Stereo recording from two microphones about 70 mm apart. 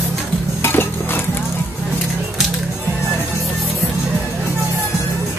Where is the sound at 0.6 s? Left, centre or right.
Left.